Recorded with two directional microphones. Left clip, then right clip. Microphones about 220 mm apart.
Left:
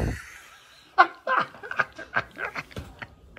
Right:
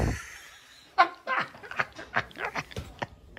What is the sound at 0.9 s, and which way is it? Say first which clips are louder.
Dog: left 4 dB; 10° right (ahead or behind).